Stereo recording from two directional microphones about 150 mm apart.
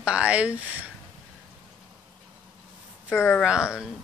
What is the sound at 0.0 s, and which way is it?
Speech, 10° right (ahead or behind).